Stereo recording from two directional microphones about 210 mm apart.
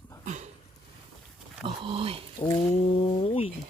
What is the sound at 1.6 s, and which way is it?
Speech, 25° right (ahead or behind).